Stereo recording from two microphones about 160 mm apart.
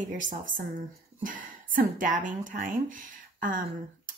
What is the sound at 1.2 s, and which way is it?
A woman's voice, 55° right (ahead or behind).